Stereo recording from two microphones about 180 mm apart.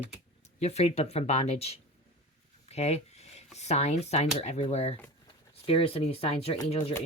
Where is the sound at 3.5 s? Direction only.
40° left (ahead or behind).